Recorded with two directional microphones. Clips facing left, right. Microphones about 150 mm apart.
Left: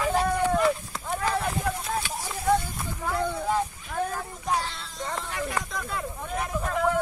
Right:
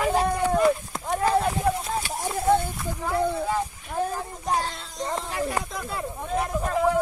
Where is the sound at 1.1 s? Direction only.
40° right (ahead or behind).